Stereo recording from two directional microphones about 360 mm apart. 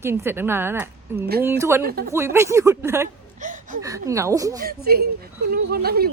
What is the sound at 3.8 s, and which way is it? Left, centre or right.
Speech, centre.